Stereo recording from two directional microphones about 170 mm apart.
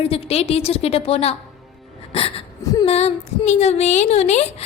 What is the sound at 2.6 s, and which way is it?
Speech, 20° left (ahead or behind).